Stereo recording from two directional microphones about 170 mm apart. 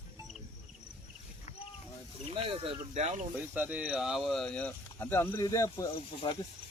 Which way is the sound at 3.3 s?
10° right (ahead or behind).